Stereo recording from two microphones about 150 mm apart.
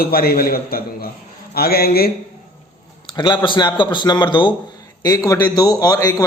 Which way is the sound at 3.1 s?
30° left (ahead or behind).